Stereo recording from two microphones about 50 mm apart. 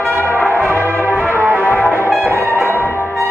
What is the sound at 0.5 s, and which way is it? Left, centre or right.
Brass instrument, right.